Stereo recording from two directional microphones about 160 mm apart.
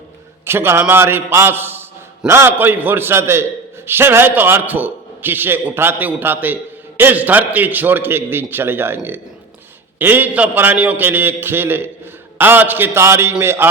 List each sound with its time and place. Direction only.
0.4 s a man's voice: 15° right (ahead or behind)